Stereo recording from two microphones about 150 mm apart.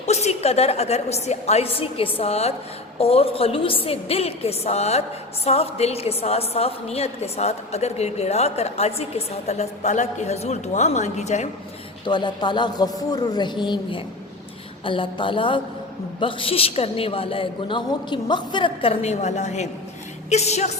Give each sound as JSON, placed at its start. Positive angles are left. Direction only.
{"t": 0.0, "sound": "a woman's voice", "side_deg": 45}
{"t": 12.0, "sound": "a woman's voice", "side_deg": 30}